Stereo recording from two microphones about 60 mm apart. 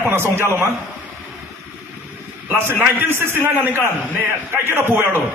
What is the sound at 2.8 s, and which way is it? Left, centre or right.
Speech, right.